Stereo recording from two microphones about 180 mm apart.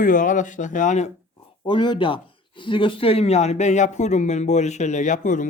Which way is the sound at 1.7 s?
25° left (ahead or behind).